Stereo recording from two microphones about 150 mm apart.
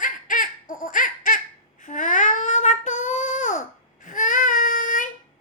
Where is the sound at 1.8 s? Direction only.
60° left (ahead or behind).